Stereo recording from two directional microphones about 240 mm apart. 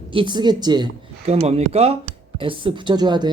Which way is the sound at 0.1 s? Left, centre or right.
Centre.